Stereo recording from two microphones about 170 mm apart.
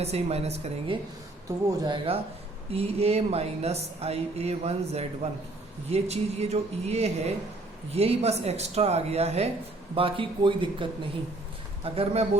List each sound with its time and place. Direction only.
0.0 s speech: 40° right (ahead or behind)